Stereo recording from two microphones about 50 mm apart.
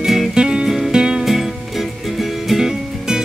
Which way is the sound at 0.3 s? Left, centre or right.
Centre.